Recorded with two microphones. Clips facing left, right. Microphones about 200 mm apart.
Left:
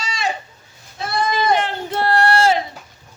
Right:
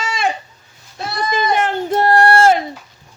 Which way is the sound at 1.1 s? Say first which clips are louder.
Even; 50° left (ahead or behind).